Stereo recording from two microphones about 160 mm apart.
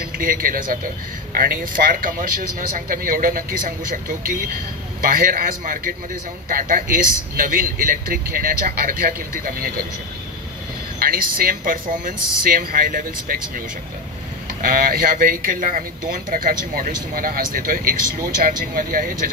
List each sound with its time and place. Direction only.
0.0 s speech: 65° right (ahead or behind)
11.0 s speech: 65° right (ahead or behind)
14.5 s speech: 60° right (ahead or behind)